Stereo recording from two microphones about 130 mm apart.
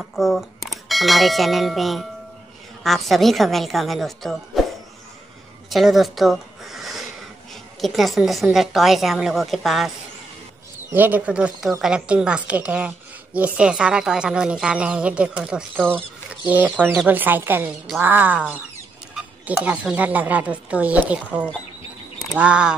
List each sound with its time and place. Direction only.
0.0 s a woman's voice: centre (ahead or behind)
5.7 s a sound: centre (ahead or behind)
7.8 s a woman's voice: centre (ahead or behind)
10.9 s a woman's voice: 15° right (ahead or behind)
19.6 s a woman's voice: 10° right (ahead or behind)